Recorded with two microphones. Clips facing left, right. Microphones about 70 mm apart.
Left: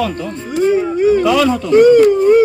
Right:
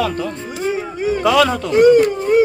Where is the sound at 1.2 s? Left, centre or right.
Right.